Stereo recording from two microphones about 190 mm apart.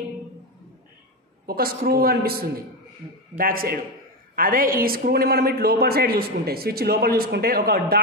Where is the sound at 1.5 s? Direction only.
50° right (ahead or behind).